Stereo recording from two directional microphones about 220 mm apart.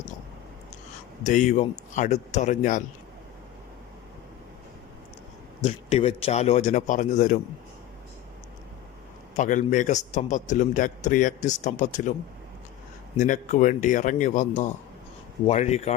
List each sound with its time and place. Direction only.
1.2 s a man's voice: 35° left (ahead or behind)
5.6 s a man's voice: 25° left (ahead or behind)
9.4 s a man's voice: 35° left (ahead or behind)
13.1 s a man's voice: 35° left (ahead or behind)